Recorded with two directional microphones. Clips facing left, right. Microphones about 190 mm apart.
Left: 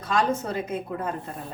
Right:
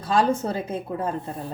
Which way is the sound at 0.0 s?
30° right (ahead or behind).